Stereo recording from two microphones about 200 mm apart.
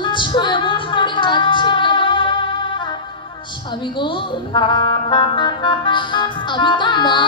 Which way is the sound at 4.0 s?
25° left (ahead or behind).